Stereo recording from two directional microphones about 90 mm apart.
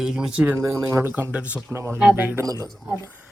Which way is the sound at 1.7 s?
30° right (ahead or behind).